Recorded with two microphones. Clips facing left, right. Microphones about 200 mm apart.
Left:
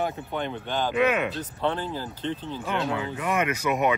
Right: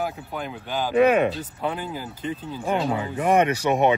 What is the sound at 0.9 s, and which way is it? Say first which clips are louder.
Speech: right 7 dB; 40° right (ahead or behind).